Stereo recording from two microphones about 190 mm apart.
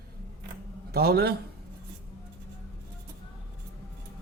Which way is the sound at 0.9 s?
55° right (ahead or behind).